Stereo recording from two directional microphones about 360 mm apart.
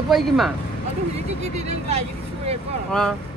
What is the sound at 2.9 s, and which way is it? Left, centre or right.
Speech, centre.